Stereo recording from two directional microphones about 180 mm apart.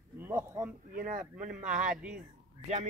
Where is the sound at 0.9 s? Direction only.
45° right (ahead or behind).